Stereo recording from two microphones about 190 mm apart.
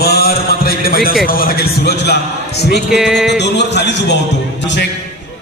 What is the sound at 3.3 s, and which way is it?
A man's voice, 65° left (ahead or behind).